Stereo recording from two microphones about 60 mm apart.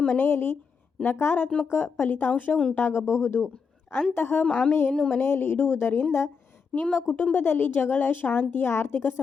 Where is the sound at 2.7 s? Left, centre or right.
Left.